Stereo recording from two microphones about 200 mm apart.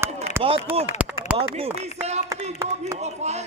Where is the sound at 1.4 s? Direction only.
30° right (ahead or behind).